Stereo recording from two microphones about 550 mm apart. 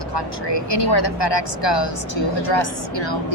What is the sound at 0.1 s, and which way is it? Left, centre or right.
A woman's voice, left.